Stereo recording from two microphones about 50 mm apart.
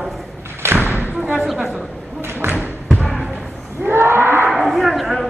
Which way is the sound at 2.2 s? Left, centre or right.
Right.